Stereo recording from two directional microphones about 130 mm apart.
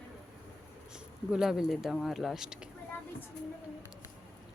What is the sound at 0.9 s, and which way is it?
Speech, 5° right (ahead or behind).